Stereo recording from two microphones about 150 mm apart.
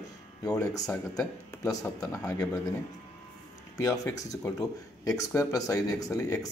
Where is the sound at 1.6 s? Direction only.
25° left (ahead or behind).